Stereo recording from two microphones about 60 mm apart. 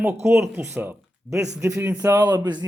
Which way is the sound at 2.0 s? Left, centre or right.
Right.